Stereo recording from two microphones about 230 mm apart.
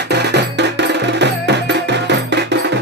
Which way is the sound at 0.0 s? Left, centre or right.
Right.